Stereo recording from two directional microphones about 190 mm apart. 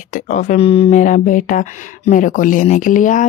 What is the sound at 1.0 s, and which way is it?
Speech, 45° left (ahead or behind).